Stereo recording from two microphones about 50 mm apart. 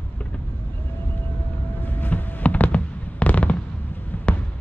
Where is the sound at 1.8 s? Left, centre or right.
Left.